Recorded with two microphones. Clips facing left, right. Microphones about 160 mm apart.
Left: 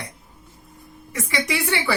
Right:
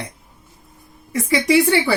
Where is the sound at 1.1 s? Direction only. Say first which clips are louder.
Right 10 dB; 35° right (ahead or behind).